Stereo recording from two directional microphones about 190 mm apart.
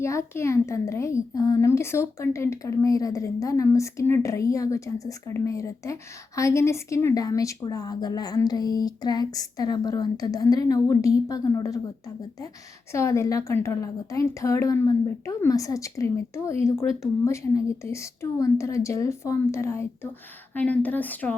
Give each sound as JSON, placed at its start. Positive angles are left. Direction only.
{"t": 0.0, "sound": "speech", "side_deg": 15}